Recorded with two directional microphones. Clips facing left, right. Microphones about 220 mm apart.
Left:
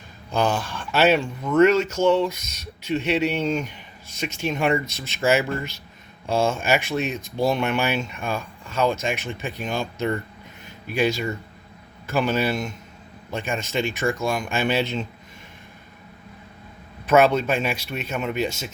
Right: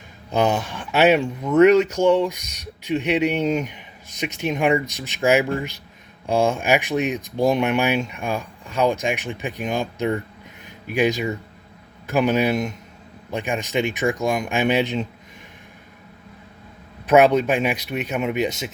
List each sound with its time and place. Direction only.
0.3 s speech: 20° right (ahead or behind)
17.1 s speech: 15° right (ahead or behind)